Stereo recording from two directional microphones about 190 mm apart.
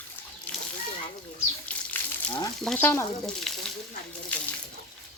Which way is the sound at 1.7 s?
5° left (ahead or behind).